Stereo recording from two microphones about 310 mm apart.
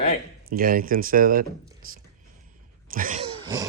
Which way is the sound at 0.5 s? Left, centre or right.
Right.